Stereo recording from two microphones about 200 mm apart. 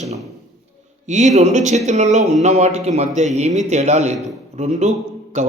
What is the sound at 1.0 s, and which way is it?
Speech, 35° right (ahead or behind).